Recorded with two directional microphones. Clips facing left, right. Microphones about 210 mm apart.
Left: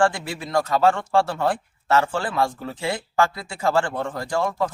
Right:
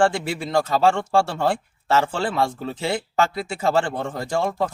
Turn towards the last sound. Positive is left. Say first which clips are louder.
# right 1 dB
turn(degrees=-25)  # may be behind; listen again after turning